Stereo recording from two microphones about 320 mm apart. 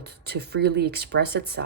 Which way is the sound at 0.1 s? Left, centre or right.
Right.